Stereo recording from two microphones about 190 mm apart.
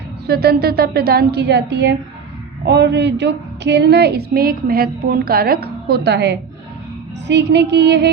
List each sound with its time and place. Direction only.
0.3 s a woman's voice: 55° right (ahead or behind)